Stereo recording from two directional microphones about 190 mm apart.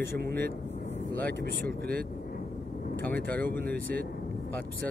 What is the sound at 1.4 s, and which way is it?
Speech, 55° right (ahead or behind).